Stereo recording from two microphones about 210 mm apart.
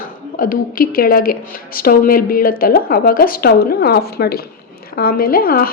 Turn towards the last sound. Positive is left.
turn(degrees=45)  # may be behind; listen again after turning